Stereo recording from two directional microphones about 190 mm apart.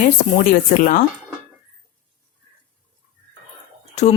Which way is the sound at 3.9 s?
35° left (ahead or behind).